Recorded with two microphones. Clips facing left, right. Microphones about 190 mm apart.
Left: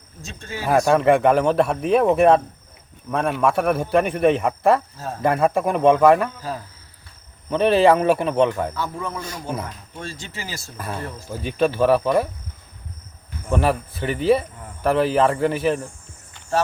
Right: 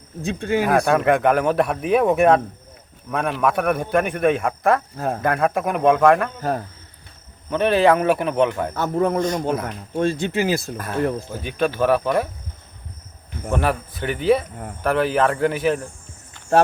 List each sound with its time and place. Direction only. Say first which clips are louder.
0.2 s speech: right 12 dB; 60° right (ahead or behind)
0.7 s speech: left 4 dB; centre (ahead or behind)
4.9 s speech: right 7 dB; 55° right (ahead or behind)
5.2 s speech: left 3 dB; centre (ahead or behind)
6.4 s speech: right 6 dB; 55° right (ahead or behind)
7.5 s speech: left 1 dB; centre (ahead or behind)
8.7 s speech: right 8 dB; 55° right (ahead or behind)
11.4 s speech: left 2 dB; centre (ahead or behind)
13.5 s speech: left 1 dB; centre (ahead or behind)